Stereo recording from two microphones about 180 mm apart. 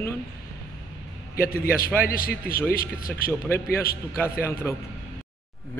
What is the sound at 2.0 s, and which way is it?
Speech, 55° left (ahead or behind).